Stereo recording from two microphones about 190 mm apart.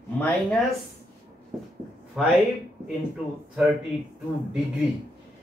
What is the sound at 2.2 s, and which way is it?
Speech, centre (ahead or behind).